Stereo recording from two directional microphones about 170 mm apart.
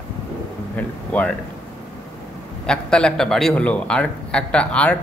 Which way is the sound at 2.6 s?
5° left (ahead or behind).